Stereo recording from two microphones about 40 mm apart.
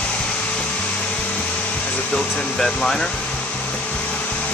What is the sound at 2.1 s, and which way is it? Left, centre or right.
Speech, centre.